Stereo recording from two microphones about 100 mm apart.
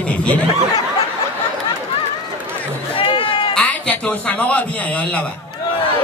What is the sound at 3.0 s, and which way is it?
Sheep, 60° left (ahead or behind).